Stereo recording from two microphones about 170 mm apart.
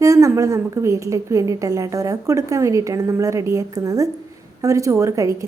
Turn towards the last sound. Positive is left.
turn(degrees=-20)  # may be behind; listen again after turning